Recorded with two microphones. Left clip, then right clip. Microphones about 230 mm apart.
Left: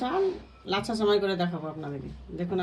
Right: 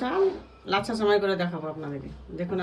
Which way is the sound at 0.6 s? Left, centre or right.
Centre.